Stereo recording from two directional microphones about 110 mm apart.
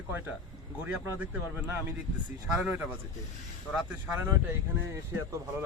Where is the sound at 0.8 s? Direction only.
15° right (ahead or behind).